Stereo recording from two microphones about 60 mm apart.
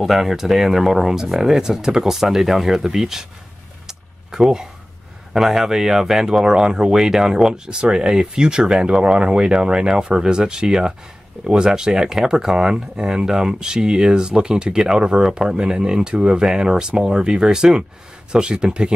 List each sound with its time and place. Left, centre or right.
0.0 s speech: centre
3.8 s a sound: centre
5.3 s speech: centre